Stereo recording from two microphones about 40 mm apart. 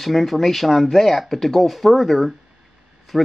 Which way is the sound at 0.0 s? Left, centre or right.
Centre.